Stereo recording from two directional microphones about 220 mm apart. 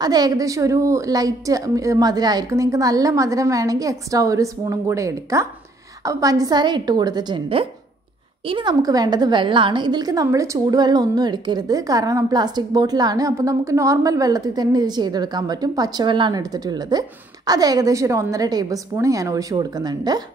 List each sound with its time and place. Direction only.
0.0 s a woman's voice: 15° right (ahead or behind)